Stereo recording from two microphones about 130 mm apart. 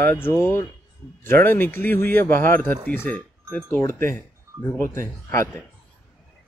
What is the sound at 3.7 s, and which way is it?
Music, 20° left (ahead or behind).